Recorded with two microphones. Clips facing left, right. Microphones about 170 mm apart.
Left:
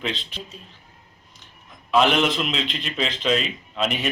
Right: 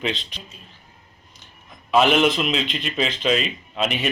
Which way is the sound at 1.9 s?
5° right (ahead or behind).